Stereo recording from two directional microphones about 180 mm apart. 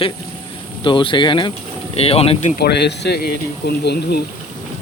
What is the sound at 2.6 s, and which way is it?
Speech, 65° left (ahead or behind).